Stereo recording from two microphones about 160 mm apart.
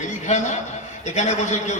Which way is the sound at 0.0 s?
50° left (ahead or behind).